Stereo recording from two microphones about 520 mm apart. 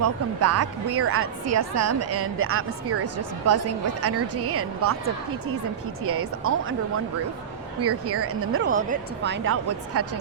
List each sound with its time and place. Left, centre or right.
0.0 s a woman's voice: right
6.0 s a woman's voice: right
7.8 s a woman's voice: right